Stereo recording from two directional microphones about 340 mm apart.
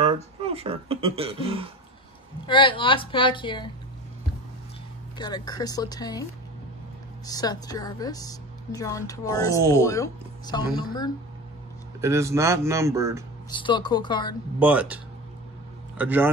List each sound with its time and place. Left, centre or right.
0.0 s speech: centre
2.4 s speech: centre
5.1 s speech: centre
7.2 s speech: centre
12.0 s speech: centre
13.5 s speech: centre
14.6 s speech: centre
16.0 s speech: centre